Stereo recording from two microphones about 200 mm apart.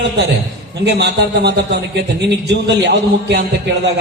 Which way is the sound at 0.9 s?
55° right (ahead or behind).